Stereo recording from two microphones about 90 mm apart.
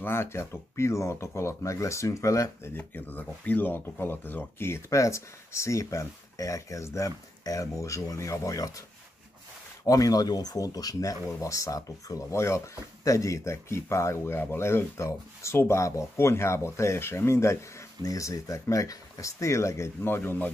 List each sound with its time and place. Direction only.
0.0 s speech: 30° left (ahead or behind)
2.7 s speech: 20° left (ahead or behind); by 8.8 s 40° left (ahead or behind)
9.8 s speech: 45° left (ahead or behind); by 20.4 s 25° left (ahead or behind)